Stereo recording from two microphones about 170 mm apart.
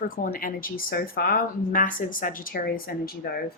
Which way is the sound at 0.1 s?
55° left (ahead or behind).